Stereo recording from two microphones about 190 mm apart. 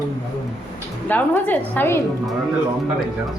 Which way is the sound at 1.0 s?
10° left (ahead or behind).